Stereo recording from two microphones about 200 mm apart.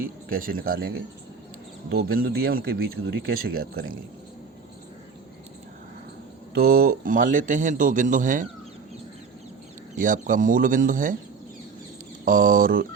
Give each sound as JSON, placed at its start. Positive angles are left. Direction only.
{"t": 0.3, "sound": "speech", "side_deg": -45}
{"t": 6.5, "sound": "a man's voice", "side_deg": -50}
{"t": 10.0, "sound": "a man's voice", "side_deg": -40}
{"t": 12.2, "sound": "speech", "side_deg": -45}